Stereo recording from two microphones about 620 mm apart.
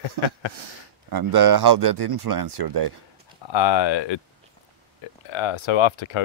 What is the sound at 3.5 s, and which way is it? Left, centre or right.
Speech, left.